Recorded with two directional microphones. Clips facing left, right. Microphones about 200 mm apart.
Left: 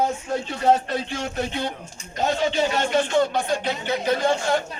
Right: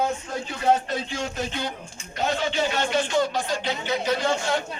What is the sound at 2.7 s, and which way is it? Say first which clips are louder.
Speech: left 3 dB; 50° left (ahead or behind).